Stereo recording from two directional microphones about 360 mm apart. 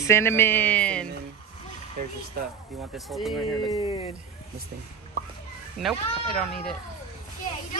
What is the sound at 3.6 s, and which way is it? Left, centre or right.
Speech, centre.